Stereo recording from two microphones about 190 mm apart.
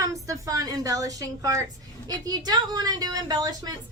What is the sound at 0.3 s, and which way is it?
A woman's voice, 20° right (ahead or behind).